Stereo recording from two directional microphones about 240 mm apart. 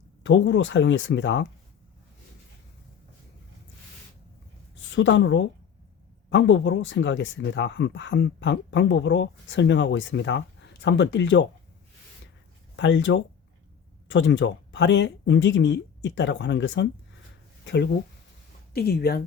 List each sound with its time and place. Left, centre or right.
0.2 s speech: left
4.9 s speech: left
12.7 s speech: left
18.7 s speech: left